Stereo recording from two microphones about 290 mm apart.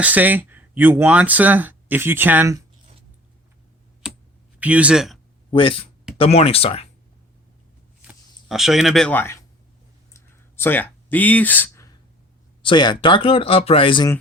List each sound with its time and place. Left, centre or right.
0.0 s speech: centre
4.0 s computer keyboard: centre
4.6 s speech: centre
5.5 s speech: centre
8.0 s speech: centre
10.1 s a sound: centre
12.6 s speech: centre